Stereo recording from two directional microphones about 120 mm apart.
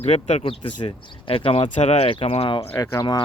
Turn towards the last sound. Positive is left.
turn(degrees=35)  # may be behind; listen again after turning